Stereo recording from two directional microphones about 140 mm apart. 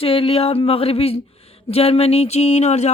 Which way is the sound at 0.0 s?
40° left (ahead or behind).